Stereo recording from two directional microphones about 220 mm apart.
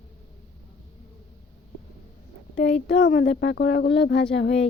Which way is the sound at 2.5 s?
50° left (ahead or behind).